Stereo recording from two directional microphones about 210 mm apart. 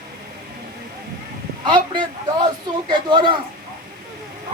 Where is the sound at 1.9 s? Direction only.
20° right (ahead or behind).